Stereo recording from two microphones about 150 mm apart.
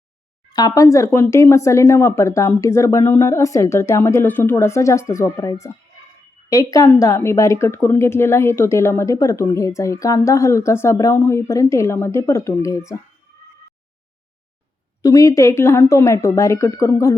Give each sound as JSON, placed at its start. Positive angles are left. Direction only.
{"t": 0.5, "sound": "a woman's voice", "side_deg": 25}
{"t": 15.0, "sound": "a woman's voice", "side_deg": 25}